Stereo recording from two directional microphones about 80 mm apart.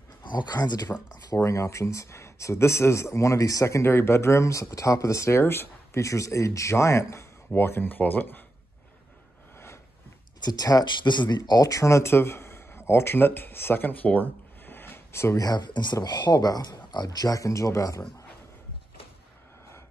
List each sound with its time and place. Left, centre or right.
0.2 s speech: left
1.3 s speech: left
10.4 s speech: left
11.0 s a man's voice: left
15.4 s speech: left